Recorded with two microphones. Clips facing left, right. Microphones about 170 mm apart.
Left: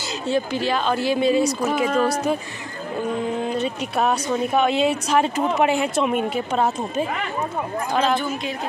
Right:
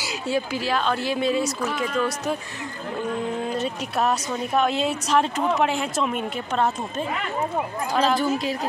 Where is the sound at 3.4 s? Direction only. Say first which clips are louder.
Left 2 dB; centre (ahead or behind).